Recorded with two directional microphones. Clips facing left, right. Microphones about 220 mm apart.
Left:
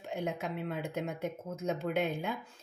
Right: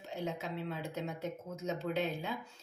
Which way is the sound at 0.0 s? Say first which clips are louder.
Left 3 dB; 55° left (ahead or behind).